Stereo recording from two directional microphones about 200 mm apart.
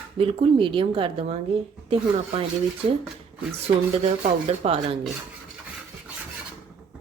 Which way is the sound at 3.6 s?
30° right (ahead or behind).